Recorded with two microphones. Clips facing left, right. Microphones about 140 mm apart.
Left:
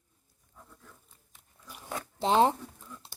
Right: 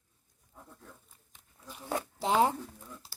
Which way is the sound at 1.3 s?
10° left (ahead or behind).